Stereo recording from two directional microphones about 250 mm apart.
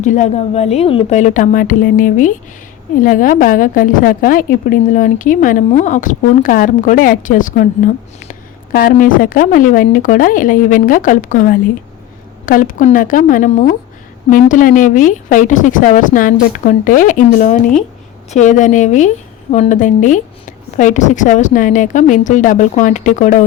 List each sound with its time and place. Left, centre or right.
0.0 s a woman's voice: left
12.5 s a woman's voice: left